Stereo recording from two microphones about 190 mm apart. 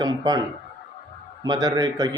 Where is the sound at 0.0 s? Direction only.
20° right (ahead or behind).